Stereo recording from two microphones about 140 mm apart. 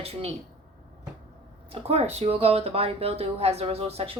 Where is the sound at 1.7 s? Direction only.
50° right (ahead or behind).